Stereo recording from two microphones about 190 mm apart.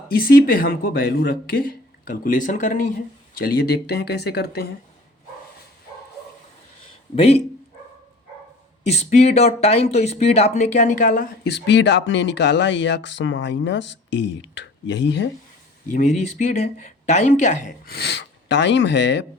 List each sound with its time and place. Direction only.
0.1 s speech: 50° left (ahead or behind)
3.3 s speech: 55° left (ahead or behind)
7.2 s speech: 35° left (ahead or behind)
8.9 s speech: 35° left (ahead or behind)
11.4 s speech: 65° left (ahead or behind)
15.9 s speech: 40° left (ahead or behind); by 19.2 s 65° left (ahead or behind)